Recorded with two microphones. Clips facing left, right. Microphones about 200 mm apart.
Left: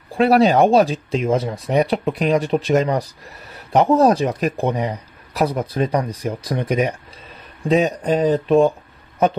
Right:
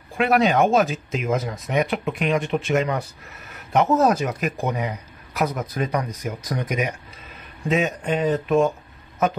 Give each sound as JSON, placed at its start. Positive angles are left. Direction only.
{"t": 0.1, "sound": "speech", "side_deg": 35}